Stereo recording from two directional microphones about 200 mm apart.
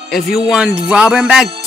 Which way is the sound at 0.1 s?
Centre (ahead or behind).